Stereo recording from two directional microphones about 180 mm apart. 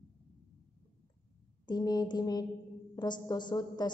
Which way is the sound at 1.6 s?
25° left (ahead or behind).